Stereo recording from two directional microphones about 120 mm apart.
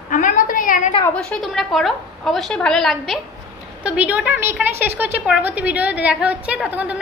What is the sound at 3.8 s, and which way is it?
A woman's voice, 10° right (ahead or behind).